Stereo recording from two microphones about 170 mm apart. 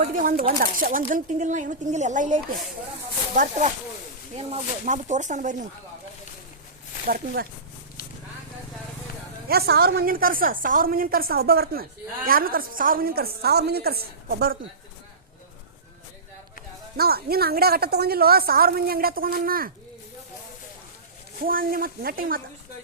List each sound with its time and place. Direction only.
0.2 s speech: 55° right (ahead or behind)
9.5 s a woman's voice: 65° right (ahead or behind)
17.0 s a woman's voice: 65° right (ahead or behind)
21.4 s a woman's voice: 55° right (ahead or behind)